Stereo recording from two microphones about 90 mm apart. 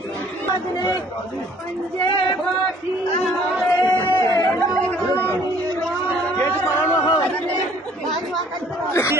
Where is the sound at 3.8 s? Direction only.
55° left (ahead or behind).